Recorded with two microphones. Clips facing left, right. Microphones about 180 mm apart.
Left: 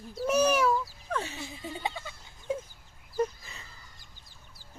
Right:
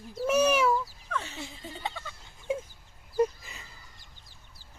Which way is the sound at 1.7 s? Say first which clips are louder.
Left 2 dB; 10° left (ahead or behind).